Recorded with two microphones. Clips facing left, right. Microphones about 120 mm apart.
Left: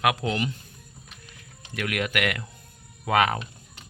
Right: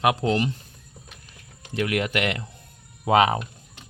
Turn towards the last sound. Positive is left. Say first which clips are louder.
# right 4 dB
turn(degrees=-25)  # may be behind; listen again after turning